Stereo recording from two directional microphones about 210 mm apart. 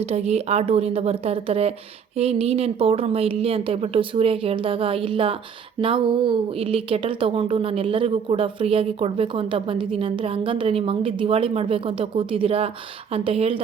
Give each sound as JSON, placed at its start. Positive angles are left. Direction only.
{"t": 0.1, "sound": "speech", "side_deg": -30}